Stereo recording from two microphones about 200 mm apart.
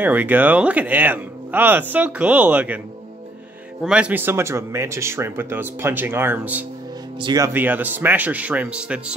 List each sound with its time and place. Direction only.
0.0 s speech: 10° right (ahead or behind)
3.8 s speech: 5° right (ahead or behind)
7.2 s speech: 20° right (ahead or behind)